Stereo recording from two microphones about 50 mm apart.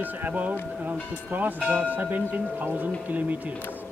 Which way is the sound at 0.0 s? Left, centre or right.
Right.